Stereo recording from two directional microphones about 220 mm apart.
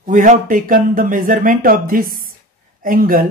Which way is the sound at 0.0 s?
35° right (ahead or behind).